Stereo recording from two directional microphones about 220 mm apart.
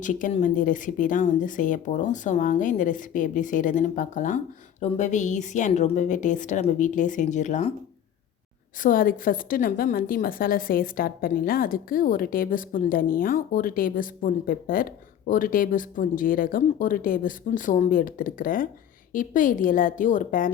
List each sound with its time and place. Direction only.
0.0 s a woman's voice: 35° left (ahead or behind)
8.8 s a woman's voice: 40° left (ahead or behind)